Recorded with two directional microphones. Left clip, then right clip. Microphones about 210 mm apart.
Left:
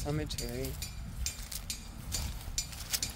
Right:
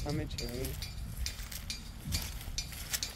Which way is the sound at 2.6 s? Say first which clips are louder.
Left 2 dB; 60° left (ahead or behind).